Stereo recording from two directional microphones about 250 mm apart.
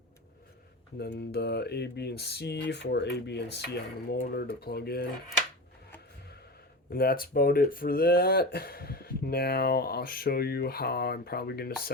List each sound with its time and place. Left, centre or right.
0.9 s speech: left
6.9 s speech: left